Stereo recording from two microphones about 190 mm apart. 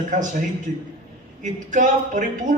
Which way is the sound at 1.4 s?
40° right (ahead or behind).